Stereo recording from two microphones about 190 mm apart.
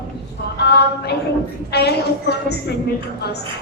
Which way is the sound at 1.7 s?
60° left (ahead or behind).